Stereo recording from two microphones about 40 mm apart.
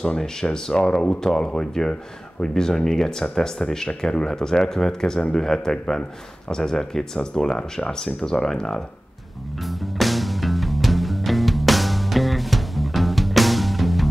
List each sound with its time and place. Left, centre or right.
0.2 s speech: centre
9.7 s music: centre